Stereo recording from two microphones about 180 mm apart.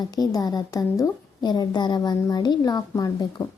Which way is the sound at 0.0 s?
20° left (ahead or behind).